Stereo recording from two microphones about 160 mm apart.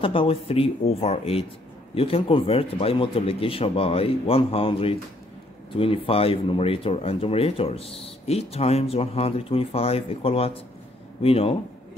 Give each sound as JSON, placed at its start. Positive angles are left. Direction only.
{"t": 0.0, "sound": "speech", "side_deg": 35}